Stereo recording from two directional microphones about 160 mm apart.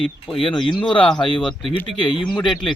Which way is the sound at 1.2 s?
30° left (ahead or behind).